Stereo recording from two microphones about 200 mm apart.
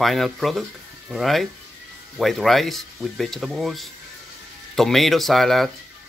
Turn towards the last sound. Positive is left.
turn(degrees=0)  # may be behind; listen again after turning